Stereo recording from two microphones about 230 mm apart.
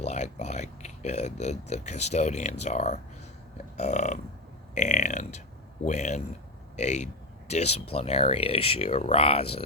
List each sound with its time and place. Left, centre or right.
0.0 s speech: left